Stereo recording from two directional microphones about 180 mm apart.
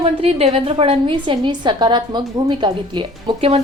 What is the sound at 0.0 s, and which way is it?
A woman's voice, 35° right (ahead or behind).